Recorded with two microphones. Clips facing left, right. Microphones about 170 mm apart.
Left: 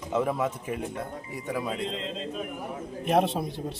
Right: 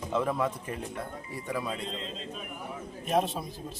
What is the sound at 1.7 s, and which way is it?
Speech, 80° left.